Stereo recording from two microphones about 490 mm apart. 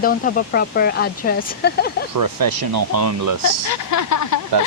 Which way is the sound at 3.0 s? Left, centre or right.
Right.